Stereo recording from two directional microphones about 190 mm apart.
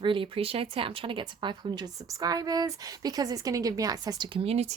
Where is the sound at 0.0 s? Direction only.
25° right (ahead or behind).